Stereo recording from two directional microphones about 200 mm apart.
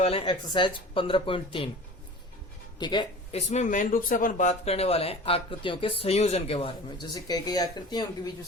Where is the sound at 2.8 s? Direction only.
20° left (ahead or behind).